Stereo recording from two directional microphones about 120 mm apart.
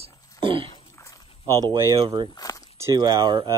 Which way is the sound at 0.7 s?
25° left (ahead or behind).